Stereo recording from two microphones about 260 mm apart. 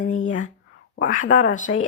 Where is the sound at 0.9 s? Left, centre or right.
Left.